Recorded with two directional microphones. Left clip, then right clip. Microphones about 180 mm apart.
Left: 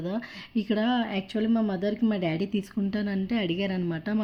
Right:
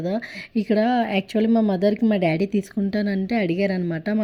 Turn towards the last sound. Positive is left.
turn(degrees=-25)  # may be behind; listen again after turning